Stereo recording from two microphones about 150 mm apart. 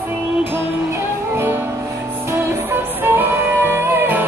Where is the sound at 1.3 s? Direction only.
15° right (ahead or behind).